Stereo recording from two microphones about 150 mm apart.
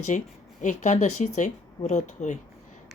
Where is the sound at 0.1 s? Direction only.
50° left (ahead or behind).